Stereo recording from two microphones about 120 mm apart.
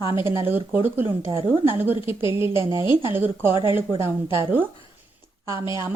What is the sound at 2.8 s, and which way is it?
Speech, 40° left (ahead or behind).